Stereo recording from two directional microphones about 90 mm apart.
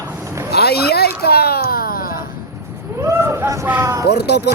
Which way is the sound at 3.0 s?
30° right (ahead or behind).